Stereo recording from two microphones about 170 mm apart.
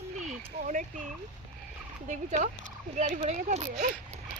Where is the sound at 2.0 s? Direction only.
45° right (ahead or behind).